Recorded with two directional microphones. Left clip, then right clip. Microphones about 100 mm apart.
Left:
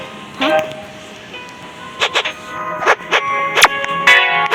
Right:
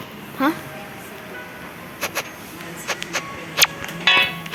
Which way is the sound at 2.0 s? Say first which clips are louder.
Left 11 dB; 15° right (ahead or behind).